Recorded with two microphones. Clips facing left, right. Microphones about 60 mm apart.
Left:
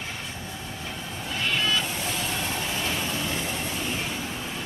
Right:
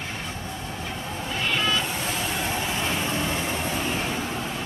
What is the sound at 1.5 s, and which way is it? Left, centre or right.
Vehicle, centre.